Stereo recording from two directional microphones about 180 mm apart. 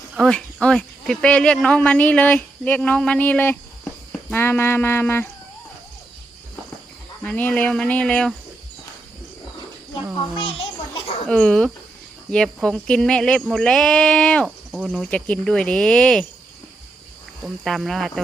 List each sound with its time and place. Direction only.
0.2 s speech: 5° left (ahead or behind)
7.3 s speech: 10° left (ahead or behind)
9.9 s a sound: 30° left (ahead or behind)
11.3 s speech: 5° left (ahead or behind)
17.4 s speech: centre (ahead or behind)